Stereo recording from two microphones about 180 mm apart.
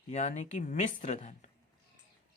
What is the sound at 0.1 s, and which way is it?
Speech, 40° left (ahead or behind).